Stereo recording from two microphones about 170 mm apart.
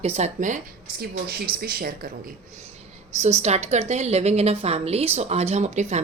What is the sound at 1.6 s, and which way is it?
Speech, 60° right (ahead or behind).